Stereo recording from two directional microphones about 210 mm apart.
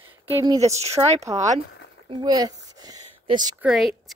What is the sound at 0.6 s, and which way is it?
Speech, 30° right (ahead or behind).